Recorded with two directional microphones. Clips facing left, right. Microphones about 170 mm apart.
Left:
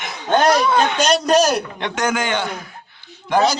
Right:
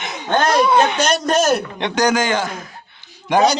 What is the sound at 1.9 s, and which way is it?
Speech, 35° right (ahead or behind).